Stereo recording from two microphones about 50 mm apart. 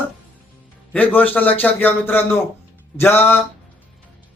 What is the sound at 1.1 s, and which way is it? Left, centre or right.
Speech, left.